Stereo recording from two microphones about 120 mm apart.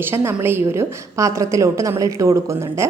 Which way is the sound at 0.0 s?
20° right (ahead or behind).